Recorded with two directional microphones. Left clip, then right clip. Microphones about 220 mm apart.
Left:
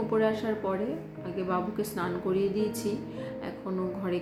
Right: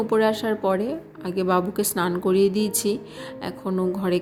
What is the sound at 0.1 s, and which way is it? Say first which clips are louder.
A woman's voice: right 6 dB; 50° right (ahead or behind).